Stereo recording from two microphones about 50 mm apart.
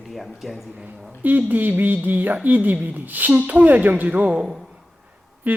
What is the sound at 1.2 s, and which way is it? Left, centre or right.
A woman's voice, right.